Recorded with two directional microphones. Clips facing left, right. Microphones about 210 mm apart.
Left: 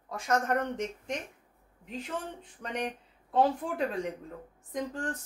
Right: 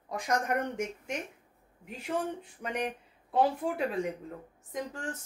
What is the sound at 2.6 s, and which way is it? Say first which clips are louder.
Speech: even; 15° right (ahead or behind).